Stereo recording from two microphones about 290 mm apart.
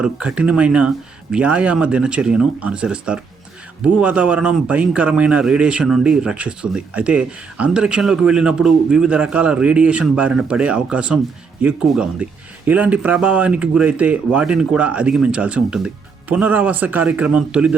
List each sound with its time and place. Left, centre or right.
0.0 s speech: centre